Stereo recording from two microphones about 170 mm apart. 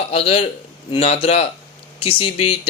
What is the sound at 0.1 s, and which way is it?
Speech, 35° left (ahead or behind).